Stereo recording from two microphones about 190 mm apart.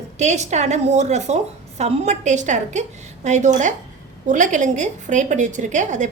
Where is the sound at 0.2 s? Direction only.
35° right (ahead or behind).